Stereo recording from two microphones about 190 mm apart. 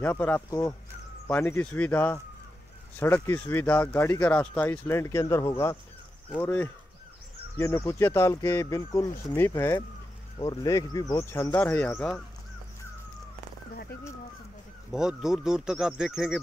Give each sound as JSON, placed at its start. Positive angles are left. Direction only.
{"t": 0.0, "sound": "speech", "side_deg": 10}
{"t": 14.9, "sound": "speech", "side_deg": -5}